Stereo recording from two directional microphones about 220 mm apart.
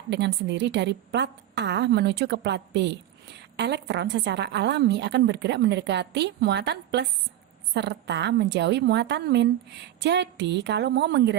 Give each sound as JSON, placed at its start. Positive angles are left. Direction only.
{"t": 0.1, "sound": "a woman's voice", "side_deg": -50}